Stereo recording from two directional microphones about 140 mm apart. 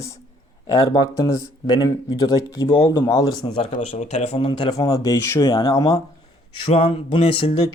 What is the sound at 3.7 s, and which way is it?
Speech, 60° left (ahead or behind).